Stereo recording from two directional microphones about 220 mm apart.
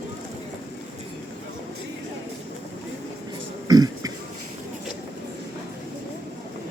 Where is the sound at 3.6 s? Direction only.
15° right (ahead or behind).